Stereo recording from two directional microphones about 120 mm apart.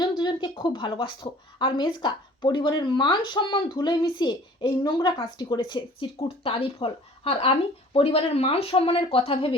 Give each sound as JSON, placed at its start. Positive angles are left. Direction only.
{"t": 0.0, "sound": "a woman's voice", "side_deg": 40}